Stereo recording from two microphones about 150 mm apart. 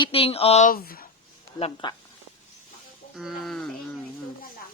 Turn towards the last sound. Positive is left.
turn(degrees=0)  # may be behind; listen again after turning